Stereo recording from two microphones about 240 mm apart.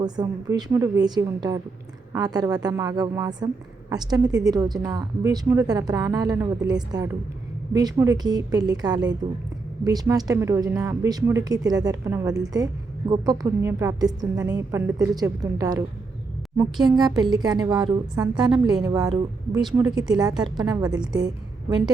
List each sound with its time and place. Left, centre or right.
0.0 s a woman's voice: centre
16.8 s a woman's voice: centre
19.5 s a woman's voice: centre
20.1 s a woman's voice: centre